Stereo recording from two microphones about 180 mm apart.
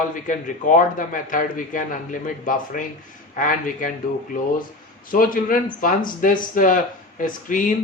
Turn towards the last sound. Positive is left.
turn(degrees=45)  # may be behind; listen again after turning